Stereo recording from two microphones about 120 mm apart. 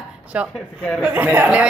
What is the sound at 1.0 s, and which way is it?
Speech, 15° right (ahead or behind).